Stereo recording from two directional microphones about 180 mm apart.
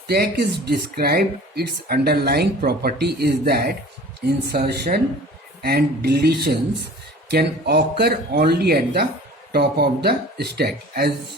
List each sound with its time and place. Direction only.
0.1 s speech: 60° right (ahead or behind)